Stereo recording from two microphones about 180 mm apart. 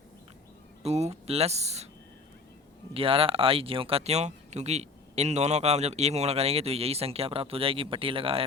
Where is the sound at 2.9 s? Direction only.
30° right (ahead or behind).